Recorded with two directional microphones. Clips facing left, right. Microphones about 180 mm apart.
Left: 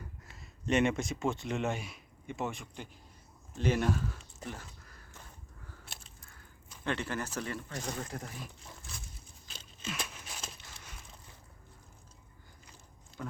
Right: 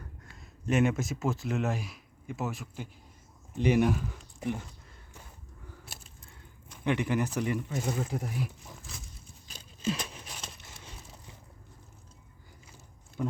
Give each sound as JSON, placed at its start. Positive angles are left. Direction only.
{"t": 0.3, "sound": "speech", "side_deg": 0}
{"t": 5.8, "sound": "biting", "side_deg": -5}
{"t": 6.8, "sound": "speech", "side_deg": -15}
{"t": 7.7, "sound": "speech", "side_deg": -5}
{"t": 9.5, "sound": "a sound", "side_deg": -35}
{"t": 13.2, "sound": "speech", "side_deg": -20}